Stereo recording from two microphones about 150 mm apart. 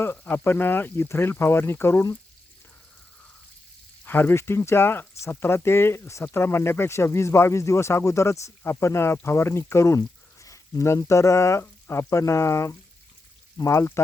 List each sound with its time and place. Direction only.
0.0 s speech: 15° left (ahead or behind)
4.0 s speech: 15° left (ahead or behind)